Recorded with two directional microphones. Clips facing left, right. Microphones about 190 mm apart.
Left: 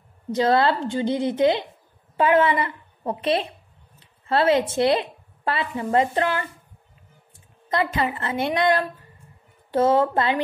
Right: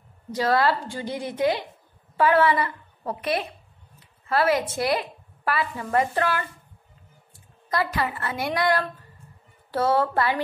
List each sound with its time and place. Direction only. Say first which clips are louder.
0.3 s a woman's voice: left 3 dB; 25° left (ahead or behind)
7.7 s a woman's voice: left 3 dB; 20° left (ahead or behind)